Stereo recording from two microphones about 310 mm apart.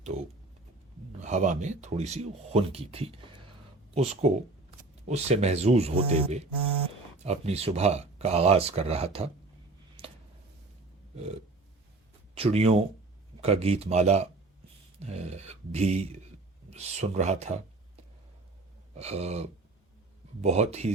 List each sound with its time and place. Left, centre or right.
1.2 s speech: right
10.0 s a sound: centre
12.3 s speech: centre
18.9 s speech: right